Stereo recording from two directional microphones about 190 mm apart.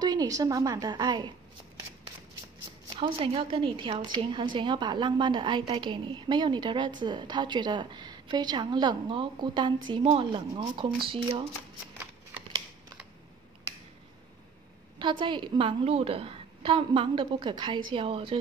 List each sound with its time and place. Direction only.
0.0 s a woman's voice: 20° right (ahead or behind)
3.0 s a woman's voice: 30° right (ahead or behind)
15.0 s a woman's voice: 25° right (ahead or behind)